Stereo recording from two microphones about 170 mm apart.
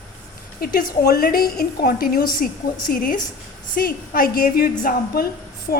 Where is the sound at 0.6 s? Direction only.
60° left (ahead or behind).